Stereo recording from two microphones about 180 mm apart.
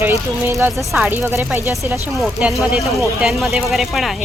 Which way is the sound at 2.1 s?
Centre (ahead or behind).